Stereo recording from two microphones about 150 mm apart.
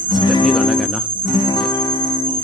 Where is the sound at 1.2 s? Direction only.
30° left (ahead or behind).